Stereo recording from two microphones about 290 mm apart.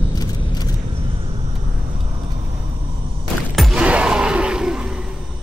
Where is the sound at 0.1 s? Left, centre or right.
Centre.